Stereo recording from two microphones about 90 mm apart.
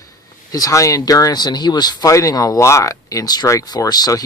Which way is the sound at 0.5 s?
40° left (ahead or behind).